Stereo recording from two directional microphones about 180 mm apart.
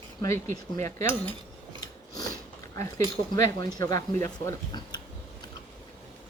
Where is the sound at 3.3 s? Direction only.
20° left (ahead or behind).